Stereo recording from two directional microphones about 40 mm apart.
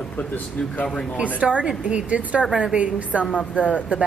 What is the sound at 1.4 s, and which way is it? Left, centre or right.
A woman's voice, right.